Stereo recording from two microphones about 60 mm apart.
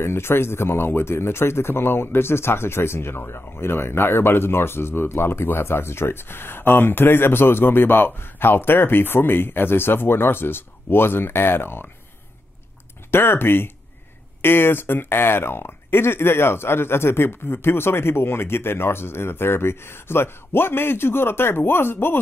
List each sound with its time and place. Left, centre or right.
0.0 s a man's voice: left
13.1 s a man's voice: left